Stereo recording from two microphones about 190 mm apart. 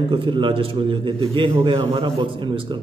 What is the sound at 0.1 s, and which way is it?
A man's voice, 25° right (ahead or behind).